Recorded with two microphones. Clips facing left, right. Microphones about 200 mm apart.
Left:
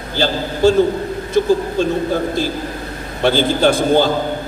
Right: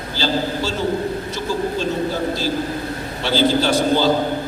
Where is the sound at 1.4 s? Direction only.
55° left (ahead or behind).